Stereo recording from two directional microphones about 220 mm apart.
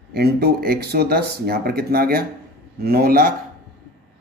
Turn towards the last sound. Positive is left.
turn(degrees=-40)  # may be behind; listen again after turning